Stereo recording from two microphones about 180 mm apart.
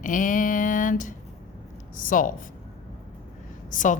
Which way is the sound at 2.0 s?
50° left (ahead or behind).